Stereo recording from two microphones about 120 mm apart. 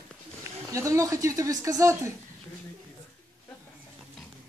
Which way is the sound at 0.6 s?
25° right (ahead or behind).